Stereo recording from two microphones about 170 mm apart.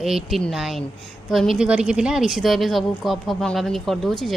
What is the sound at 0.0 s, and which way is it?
Speech, centre (ahead or behind).